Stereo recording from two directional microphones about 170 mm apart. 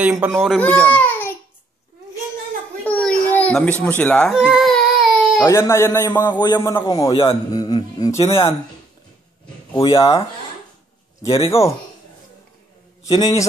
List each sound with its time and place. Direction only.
0.0 s speech: 10° right (ahead or behind)
0.6 s speech: 10° left (ahead or behind)
2.8 s a sound: 5° left (ahead or behind)
3.8 s speech: 5° left (ahead or behind)
4.4 s baby cry: 5° right (ahead or behind)
5.4 s a man's voice: 15° left (ahead or behind)
8.2 s speech: 35° left (ahead or behind)
9.8 s speech: 30° left (ahead or behind)
11.2 s speech: 35° left (ahead or behind)
13.1 s a man's voice: 20° left (ahead or behind)